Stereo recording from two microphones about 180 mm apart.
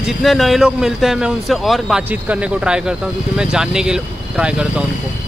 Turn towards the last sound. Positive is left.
turn(degrees=-5)  # may be behind; listen again after turning